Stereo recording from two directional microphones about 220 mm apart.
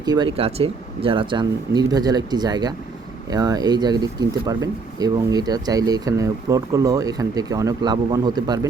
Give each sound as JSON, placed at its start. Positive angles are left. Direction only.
{"t": 0.0, "sound": "speech", "side_deg": -20}